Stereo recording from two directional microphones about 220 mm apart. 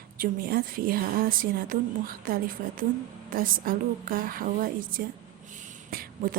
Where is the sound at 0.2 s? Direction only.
40° right (ahead or behind).